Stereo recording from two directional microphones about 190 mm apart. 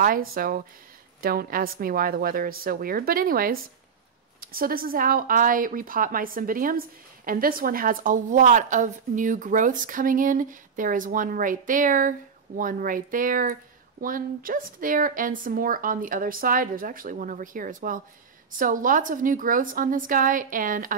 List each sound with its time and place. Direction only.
0.0 s a woman's voice: 50° right (ahead or behind)